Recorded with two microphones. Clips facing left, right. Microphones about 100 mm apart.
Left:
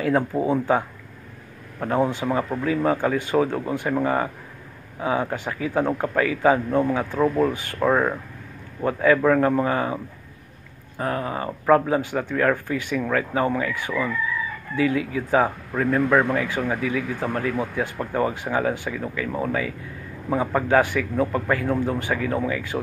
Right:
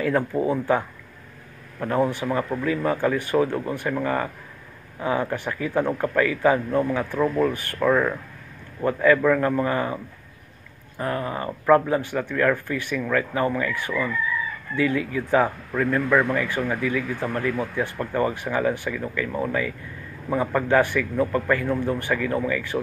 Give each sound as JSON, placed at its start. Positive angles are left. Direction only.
{"t": 0.0, "sound": "a man's voice", "side_deg": 15}
{"t": 11.0, "sound": "a man's voice", "side_deg": 15}